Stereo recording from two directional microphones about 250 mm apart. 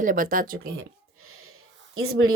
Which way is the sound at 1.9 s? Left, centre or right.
Right.